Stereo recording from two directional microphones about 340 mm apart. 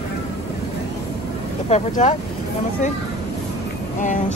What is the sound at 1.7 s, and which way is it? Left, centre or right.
Speech, centre.